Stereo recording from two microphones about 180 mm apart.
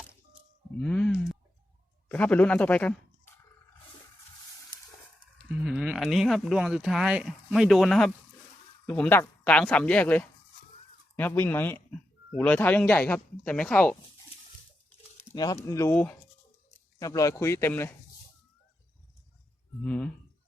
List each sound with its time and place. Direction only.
0.8 s a sound: 5° left (ahead or behind)
2.0 s speech: 10° left (ahead or behind)
5.5 s speech: 5° right (ahead or behind)
15.3 s speech: 20° left (ahead or behind)
19.8 s speech: 5° left (ahead or behind)